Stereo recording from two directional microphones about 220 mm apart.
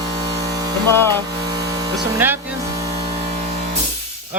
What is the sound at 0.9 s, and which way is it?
Speech, 10° left (ahead or behind).